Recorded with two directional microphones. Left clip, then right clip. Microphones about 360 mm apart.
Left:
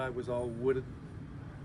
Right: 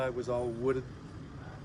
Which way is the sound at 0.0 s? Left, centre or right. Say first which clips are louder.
Right 3 dB; centre.